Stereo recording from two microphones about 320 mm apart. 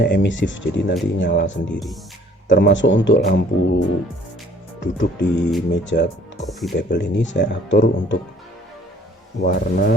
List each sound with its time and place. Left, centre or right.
0.0 s speech: left
1.7 s speech: centre
2.5 s speech: left
6.5 s speech: centre
6.7 s speech: left
9.4 s speech: left